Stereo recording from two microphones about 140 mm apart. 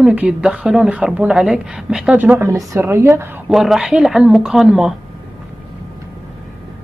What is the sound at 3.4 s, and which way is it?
A woman's voice, 5° right (ahead or behind).